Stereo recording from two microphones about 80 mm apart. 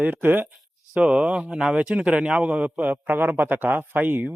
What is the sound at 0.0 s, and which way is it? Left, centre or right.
Speech, right.